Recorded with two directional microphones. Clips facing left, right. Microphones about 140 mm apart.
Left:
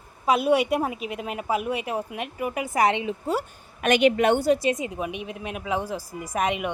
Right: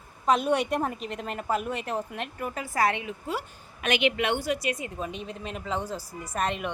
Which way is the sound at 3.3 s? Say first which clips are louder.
Left 6 dB; 45° left (ahead or behind).